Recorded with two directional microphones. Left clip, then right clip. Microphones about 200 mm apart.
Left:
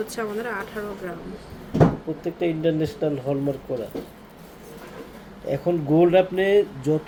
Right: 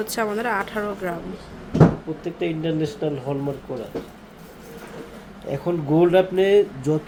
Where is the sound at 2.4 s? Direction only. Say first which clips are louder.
Left 2 dB; 15° left (ahead or behind).